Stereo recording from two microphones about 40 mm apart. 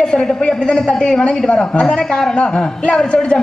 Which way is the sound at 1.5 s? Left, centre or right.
Left.